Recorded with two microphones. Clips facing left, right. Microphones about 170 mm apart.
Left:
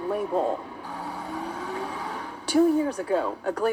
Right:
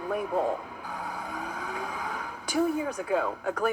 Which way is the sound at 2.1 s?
30° left (ahead or behind).